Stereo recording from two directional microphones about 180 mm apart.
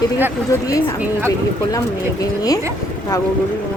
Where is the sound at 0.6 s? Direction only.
20° left (ahead or behind).